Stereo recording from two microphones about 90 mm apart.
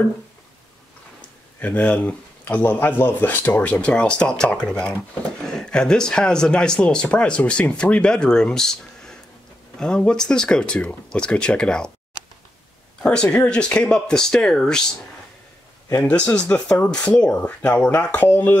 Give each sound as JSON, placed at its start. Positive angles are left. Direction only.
{"t": 1.6, "sound": "speech", "side_deg": 15}
{"t": 13.0, "sound": "speech", "side_deg": 10}
{"t": 16.0, "sound": "speech", "side_deg": 15}